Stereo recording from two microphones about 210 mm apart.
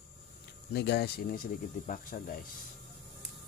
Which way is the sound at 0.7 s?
55° left (ahead or behind).